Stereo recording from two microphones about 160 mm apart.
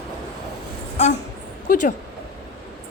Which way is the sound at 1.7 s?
60° left (ahead or behind).